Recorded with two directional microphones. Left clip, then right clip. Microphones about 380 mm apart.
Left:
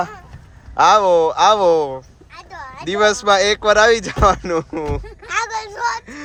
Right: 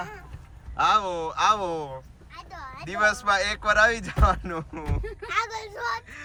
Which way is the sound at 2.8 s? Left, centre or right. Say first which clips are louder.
Left 8 dB; centre.